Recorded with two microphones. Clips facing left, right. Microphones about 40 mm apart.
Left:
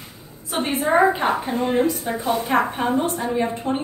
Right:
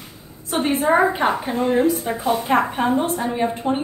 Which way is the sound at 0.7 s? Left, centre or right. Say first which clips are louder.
Even; centre.